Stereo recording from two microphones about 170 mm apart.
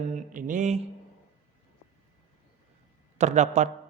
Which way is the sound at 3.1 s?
45° right (ahead or behind).